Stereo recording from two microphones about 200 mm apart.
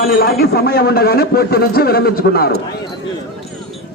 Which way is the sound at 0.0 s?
50° left (ahead or behind).